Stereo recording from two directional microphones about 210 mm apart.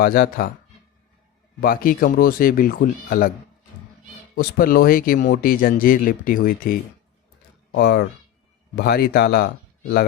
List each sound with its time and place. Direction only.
0.0 s speech: 45° left (ahead or behind)
1.6 s speech: 45° left (ahead or behind)
4.4 s speech: 45° left (ahead or behind)
7.7 s speech: 50° left (ahead or behind)